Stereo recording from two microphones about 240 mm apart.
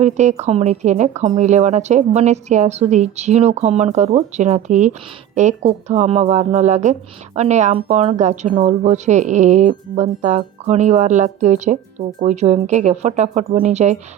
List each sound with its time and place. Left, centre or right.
0.0 s speech: right